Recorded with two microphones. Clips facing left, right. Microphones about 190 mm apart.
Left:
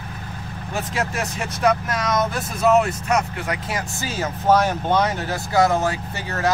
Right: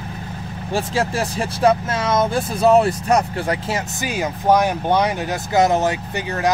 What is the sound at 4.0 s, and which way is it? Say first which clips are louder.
Speech: right 3 dB; 15° right (ahead or behind).